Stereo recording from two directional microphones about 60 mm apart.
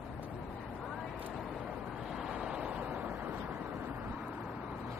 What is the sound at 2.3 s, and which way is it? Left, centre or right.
Vehicle, centre.